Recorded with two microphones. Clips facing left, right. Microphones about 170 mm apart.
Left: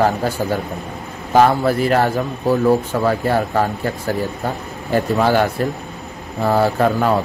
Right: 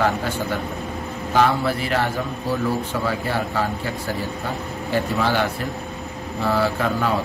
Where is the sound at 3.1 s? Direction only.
45° left (ahead or behind).